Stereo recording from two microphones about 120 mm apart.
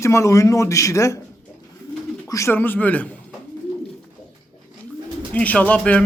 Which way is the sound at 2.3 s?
25° left (ahead or behind).